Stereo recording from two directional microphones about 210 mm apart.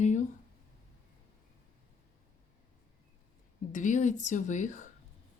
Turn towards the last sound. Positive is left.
turn(degrees=35)  # may be behind; listen again after turning